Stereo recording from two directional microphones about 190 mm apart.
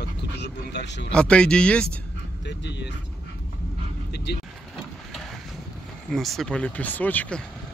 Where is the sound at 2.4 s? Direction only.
65° left (ahead or behind).